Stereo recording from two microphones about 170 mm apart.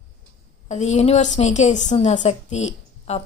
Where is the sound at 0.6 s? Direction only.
40° left (ahead or behind).